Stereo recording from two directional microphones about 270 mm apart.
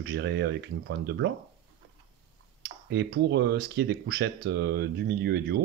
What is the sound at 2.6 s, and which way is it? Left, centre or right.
Speech, right.